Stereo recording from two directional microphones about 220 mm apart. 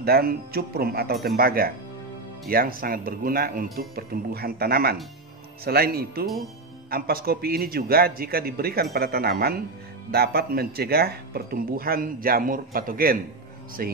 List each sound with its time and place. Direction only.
0.0 s a man's voice: 45° right (ahead or behind)